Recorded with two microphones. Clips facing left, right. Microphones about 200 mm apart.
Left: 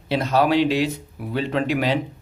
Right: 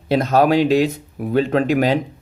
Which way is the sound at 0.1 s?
45° right (ahead or behind).